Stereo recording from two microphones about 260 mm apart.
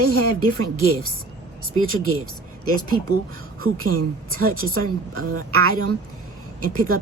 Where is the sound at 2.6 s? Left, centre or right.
Right.